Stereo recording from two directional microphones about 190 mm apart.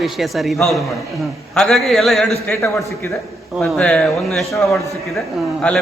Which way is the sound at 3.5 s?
Centre (ahead or behind).